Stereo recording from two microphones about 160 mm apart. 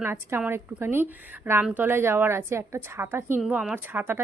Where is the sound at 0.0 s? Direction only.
15° right (ahead or behind).